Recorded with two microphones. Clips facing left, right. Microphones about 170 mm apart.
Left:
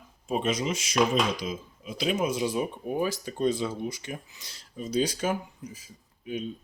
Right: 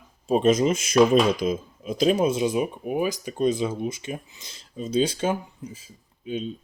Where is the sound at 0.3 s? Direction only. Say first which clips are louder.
Right 8 dB; 40° right (ahead or behind).